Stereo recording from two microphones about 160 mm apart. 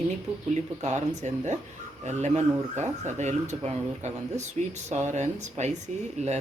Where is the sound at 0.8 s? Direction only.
45° right (ahead or behind).